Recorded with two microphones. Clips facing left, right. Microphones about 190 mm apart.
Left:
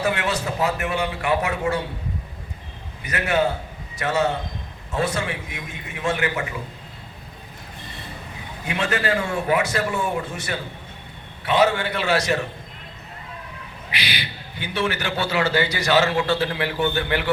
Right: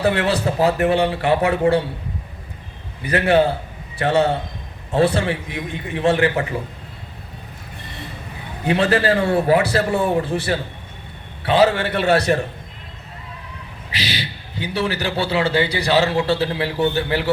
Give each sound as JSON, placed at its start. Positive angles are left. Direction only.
{"t": 0.0, "sound": "a man's voice", "side_deg": -35}
{"t": 3.0, "sound": "a man's voice", "side_deg": -30}
{"t": 8.6, "sound": "a man's voice", "side_deg": -35}
{"t": 14.0, "sound": "a man's voice", "side_deg": -30}